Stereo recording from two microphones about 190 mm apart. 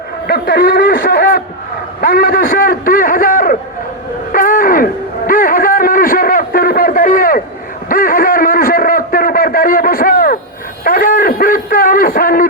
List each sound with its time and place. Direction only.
0.3 s a man's voice: 50° left (ahead or behind)
4.3 s a sound: 45° left (ahead or behind)
10.8 s radio: 45° left (ahead or behind)